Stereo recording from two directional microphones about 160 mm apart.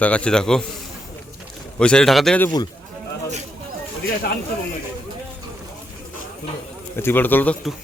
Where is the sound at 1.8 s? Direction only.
5° left (ahead or behind).